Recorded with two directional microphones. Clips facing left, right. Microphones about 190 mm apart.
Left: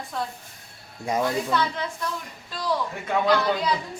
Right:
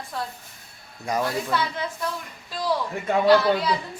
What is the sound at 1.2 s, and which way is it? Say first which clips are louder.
Speech: left 2 dB; 5° right (ahead or behind).